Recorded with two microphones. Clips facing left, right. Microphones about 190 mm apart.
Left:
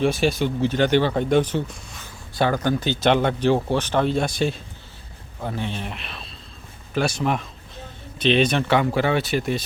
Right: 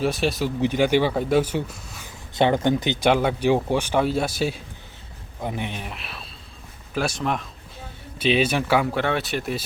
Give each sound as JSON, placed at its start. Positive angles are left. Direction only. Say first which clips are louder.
{"t": 0.0, "sound": "speech", "louder": "left 2 dB", "side_deg": 0}
{"t": 0.6, "sound": "speech", "louder": "even", "side_deg": -10}
{"t": 2.3, "sound": "speech", "louder": "right 2 dB", "side_deg": -20}
{"t": 3.1, "sound": "speech", "louder": "left 1 dB", "side_deg": -5}